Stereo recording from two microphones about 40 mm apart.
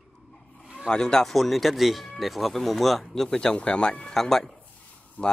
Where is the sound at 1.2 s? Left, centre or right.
Centre; by 4.1 s left.